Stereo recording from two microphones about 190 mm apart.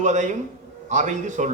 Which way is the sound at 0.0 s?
40° right (ahead or behind).